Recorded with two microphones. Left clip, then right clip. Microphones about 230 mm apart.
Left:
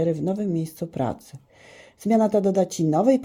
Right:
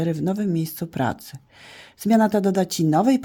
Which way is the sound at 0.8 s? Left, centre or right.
Right.